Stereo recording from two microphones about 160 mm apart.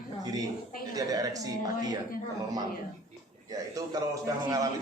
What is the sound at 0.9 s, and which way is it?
A man's voice, 25° right (ahead or behind).